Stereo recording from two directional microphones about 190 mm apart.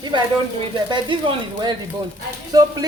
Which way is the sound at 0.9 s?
25° right (ahead or behind).